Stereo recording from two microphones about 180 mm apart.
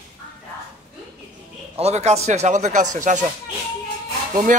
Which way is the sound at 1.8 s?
35° right (ahead or behind).